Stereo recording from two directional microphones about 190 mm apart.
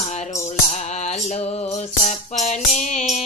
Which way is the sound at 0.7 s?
35° left (ahead or behind).